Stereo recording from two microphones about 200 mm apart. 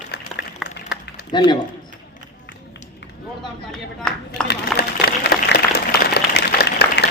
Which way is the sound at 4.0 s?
5° left (ahead or behind).